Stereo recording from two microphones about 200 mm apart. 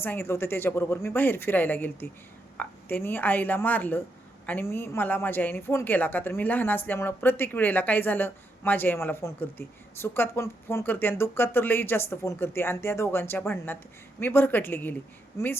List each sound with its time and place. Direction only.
0.0 s a woman's voice: 10° left (ahead or behind)